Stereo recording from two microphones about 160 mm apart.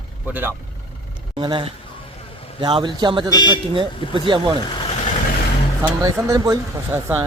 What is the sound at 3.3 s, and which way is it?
Speech, 25° left (ahead or behind).